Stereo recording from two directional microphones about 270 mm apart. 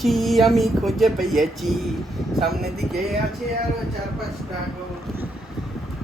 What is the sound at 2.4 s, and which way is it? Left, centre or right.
Speech, right.